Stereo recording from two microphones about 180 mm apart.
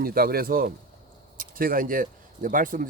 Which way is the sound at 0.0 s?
55° right (ahead or behind).